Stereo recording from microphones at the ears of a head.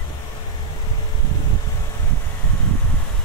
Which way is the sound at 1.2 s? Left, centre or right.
Right.